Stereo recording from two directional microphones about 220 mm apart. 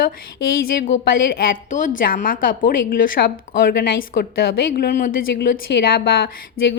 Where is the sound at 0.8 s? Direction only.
40° left (ahead or behind).